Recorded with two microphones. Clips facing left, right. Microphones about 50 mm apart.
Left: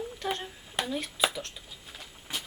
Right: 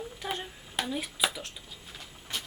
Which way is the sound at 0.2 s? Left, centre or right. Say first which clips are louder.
Left 1 dB; centre.